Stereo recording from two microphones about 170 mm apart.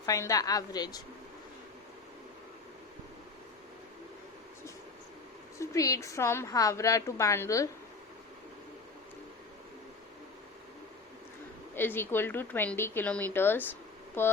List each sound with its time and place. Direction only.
0.0 s a woman's voice: 20° left (ahead or behind)
5.5 s a woman's voice: 20° left (ahead or behind)
11.7 s a woman's voice: 10° left (ahead or behind)